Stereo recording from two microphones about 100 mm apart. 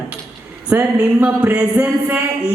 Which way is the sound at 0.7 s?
15° right (ahead or behind).